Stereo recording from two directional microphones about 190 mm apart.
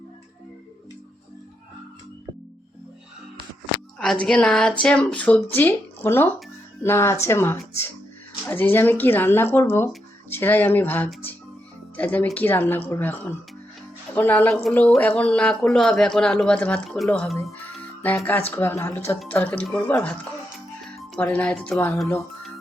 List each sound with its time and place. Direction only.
3.9 s speech: 5° left (ahead or behind)